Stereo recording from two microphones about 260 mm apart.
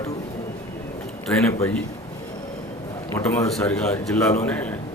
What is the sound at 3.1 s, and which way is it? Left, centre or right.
A man's voice, centre.